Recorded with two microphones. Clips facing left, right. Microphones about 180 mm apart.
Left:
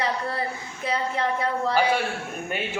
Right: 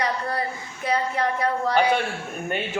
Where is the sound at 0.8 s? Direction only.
25° left (ahead or behind).